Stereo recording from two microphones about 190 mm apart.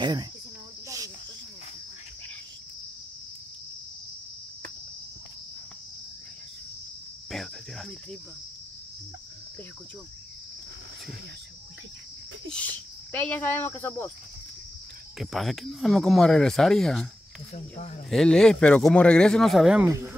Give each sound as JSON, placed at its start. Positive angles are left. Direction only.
{"t": 0.0, "sound": "speech", "side_deg": -20}
{"t": 0.8, "sound": "cricket", "side_deg": -20}
{"t": 7.2, "sound": "cricket", "side_deg": 0}
{"t": 12.4, "sound": "speech", "side_deg": 5}
{"t": 15.1, "sound": "speech", "side_deg": 0}
{"t": 17.7, "sound": "speech", "side_deg": 40}
{"t": 18.1, "sound": "speech", "side_deg": 5}
{"t": 19.9, "sound": "speech", "side_deg": -15}